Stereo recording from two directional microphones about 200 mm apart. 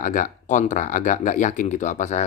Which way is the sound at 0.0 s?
40° left (ahead or behind).